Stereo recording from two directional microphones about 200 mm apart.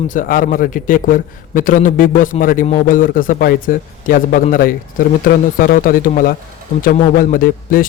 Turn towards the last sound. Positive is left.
turn(degrees=45)  # may be behind; listen again after turning